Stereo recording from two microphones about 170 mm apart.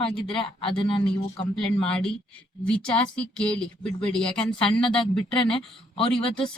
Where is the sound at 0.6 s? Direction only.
30° left (ahead or behind).